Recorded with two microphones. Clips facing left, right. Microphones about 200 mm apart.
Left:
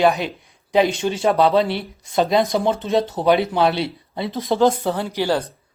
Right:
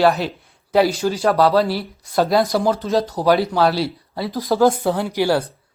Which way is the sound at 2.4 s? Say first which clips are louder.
Right 1 dB; centre (ahead or behind).